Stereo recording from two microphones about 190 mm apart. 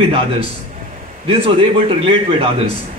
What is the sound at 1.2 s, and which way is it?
A man's voice, 30° right (ahead or behind).